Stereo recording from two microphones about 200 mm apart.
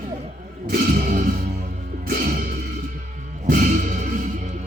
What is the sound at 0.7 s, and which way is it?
Music, 45° right (ahead or behind).